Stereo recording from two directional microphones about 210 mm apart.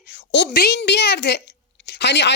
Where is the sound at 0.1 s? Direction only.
55° left (ahead or behind).